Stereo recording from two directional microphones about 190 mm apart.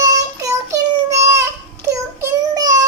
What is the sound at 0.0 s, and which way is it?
Child singing, 15° right (ahead or behind).